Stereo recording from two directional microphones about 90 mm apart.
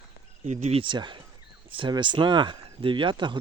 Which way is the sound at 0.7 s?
70° right (ahead or behind).